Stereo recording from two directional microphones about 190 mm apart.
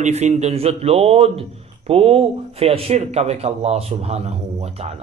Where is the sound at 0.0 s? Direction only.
35° right (ahead or behind).